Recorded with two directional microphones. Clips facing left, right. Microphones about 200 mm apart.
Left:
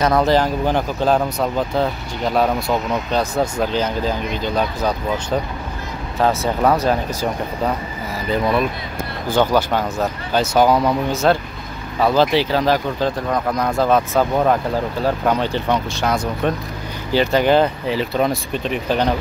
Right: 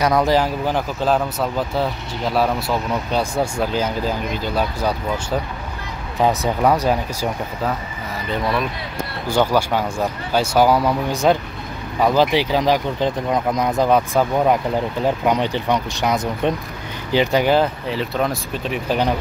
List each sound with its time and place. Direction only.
0.0 s speech: 15° right (ahead or behind)
8.3 s speech: 10° left (ahead or behind)
9.3 s speech: 10° right (ahead or behind)